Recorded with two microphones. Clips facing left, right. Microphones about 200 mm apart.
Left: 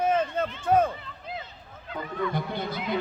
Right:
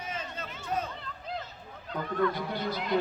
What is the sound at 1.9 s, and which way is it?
Speech, centre (ahead or behind).